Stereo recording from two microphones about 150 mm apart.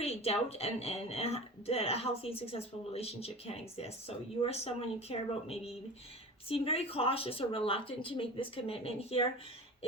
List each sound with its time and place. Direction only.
0.0 s a woman's voice: 45° left (ahead or behind)